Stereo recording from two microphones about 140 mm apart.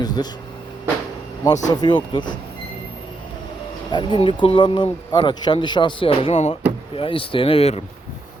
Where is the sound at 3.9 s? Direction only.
35° left (ahead or behind).